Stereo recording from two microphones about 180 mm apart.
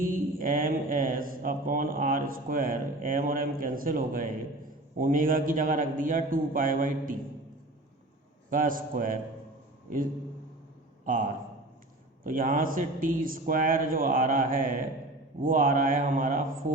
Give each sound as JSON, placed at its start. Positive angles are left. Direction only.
{"t": 0.0, "sound": "speech", "side_deg": -50}
{"t": 8.4, "sound": "speech", "side_deg": -50}
{"t": 11.0, "sound": "a man's voice", "side_deg": -50}